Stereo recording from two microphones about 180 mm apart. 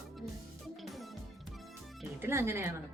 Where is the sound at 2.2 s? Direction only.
15° right (ahead or behind).